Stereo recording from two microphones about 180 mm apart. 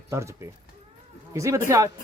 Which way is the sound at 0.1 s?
15° right (ahead or behind).